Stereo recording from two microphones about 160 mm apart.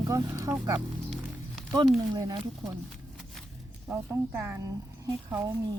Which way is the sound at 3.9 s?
10° right (ahead or behind).